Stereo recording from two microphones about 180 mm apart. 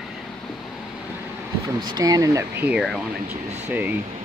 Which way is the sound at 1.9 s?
20° right (ahead or behind).